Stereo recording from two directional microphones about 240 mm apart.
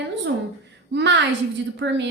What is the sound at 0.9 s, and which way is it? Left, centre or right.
Speech, right.